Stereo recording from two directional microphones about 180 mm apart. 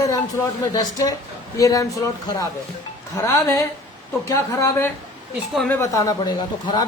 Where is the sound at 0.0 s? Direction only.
20° left (ahead or behind).